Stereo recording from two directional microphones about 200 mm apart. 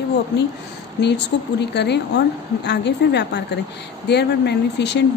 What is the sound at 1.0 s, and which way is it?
Speech, 60° left (ahead or behind).